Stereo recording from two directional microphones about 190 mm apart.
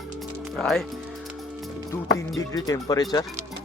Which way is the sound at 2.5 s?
20° left (ahead or behind).